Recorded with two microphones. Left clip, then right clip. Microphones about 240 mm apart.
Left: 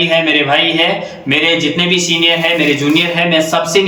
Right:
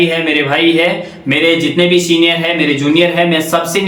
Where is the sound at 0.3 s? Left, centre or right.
Centre.